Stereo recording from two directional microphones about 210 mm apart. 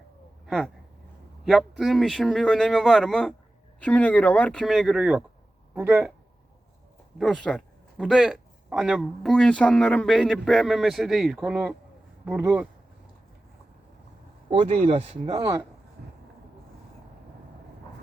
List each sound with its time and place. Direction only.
0.4 s speech: centre (ahead or behind)
7.2 s speech: centre (ahead or behind)
14.5 s speech: 25° right (ahead or behind)